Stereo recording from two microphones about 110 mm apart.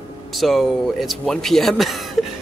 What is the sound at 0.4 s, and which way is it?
A man's voice, centre (ahead or behind).